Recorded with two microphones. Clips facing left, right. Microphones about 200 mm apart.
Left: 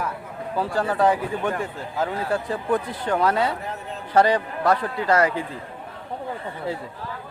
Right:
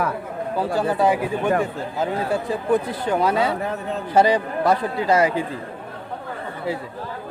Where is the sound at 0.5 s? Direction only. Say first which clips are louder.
Right 2 dB; 10° right (ahead or behind).